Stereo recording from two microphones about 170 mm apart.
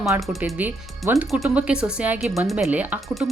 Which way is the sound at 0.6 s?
15° right (ahead or behind).